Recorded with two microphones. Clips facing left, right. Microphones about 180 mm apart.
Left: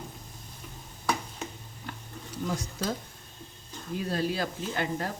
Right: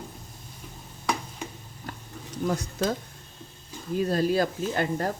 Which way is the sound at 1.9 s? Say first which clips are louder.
Right 2 dB; 40° right (ahead or behind).